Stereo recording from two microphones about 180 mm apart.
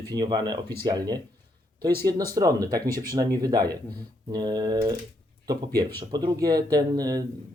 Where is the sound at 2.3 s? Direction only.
20° right (ahead or behind).